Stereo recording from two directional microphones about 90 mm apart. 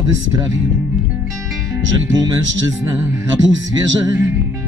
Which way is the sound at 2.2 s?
40° right (ahead or behind).